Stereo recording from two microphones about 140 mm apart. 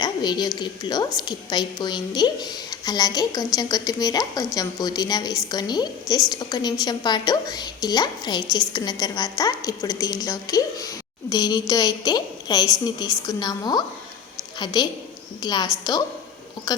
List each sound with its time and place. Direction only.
0.0 s a woman's voice: 30° left (ahead or behind)